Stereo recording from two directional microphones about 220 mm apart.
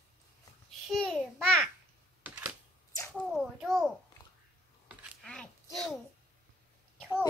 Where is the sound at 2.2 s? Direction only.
10° right (ahead or behind).